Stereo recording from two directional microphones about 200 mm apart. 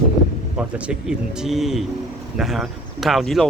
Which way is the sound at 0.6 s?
5° right (ahead or behind).